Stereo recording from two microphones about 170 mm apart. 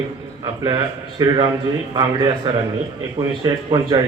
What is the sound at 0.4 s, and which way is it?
Speech, 25° right (ahead or behind).